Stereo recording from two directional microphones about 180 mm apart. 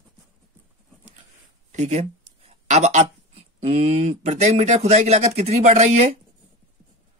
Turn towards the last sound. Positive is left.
turn(degrees=-40)  # may be behind; listen again after turning